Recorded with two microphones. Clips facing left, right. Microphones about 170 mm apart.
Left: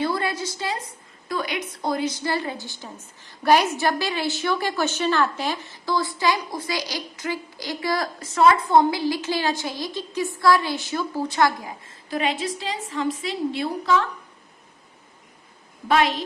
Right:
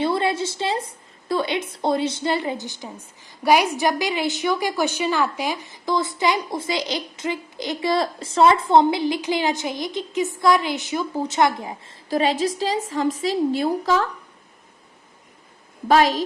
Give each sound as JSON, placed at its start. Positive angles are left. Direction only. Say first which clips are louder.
{"t": 0.0, "sound": "a sound", "louder": "right 4 dB", "side_deg": -25}
{"t": 1.3, "sound": "a woman's voice", "louder": "right 5 dB", "side_deg": -25}
{"t": 12.0, "sound": "a woman's voice", "louder": "right 5 dB", "side_deg": -35}
{"t": 15.9, "sound": "a woman's voice", "louder": "right 4 dB", "side_deg": -40}